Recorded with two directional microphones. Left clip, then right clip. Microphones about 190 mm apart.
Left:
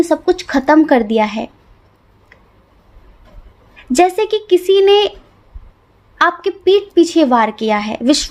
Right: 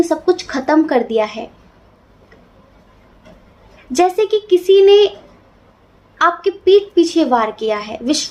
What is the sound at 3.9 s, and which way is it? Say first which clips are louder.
A woman's voice: left 1 dB; 50° left (ahead or behind).